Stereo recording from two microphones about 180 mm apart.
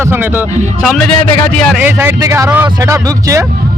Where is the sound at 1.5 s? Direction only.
5° left (ahead or behind).